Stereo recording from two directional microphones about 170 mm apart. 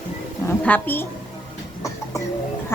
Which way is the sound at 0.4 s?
10° left (ahead or behind).